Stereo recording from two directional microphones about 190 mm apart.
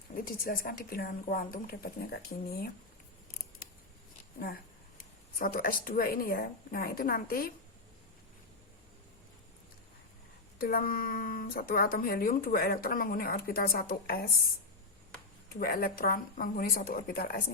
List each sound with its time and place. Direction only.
0.3 s speech: 50° left (ahead or behind)
5.4 s speech: 45° left (ahead or behind)
10.6 s speech: 50° left (ahead or behind)
15.5 s speech: 50° left (ahead or behind)